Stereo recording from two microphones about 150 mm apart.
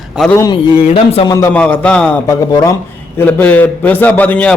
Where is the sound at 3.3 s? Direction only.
10° left (ahead or behind).